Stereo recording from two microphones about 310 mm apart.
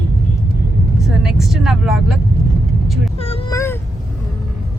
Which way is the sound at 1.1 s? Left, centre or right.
Centre.